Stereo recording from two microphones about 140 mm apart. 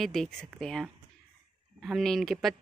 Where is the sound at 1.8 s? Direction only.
Centre (ahead or behind).